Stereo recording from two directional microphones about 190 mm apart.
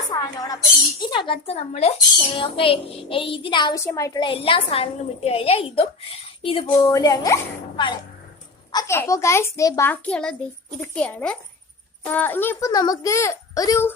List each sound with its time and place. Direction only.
0.1 s a woman's voice: 20° left (ahead or behind)
6.9 s a child's voice: 20° left (ahead or behind)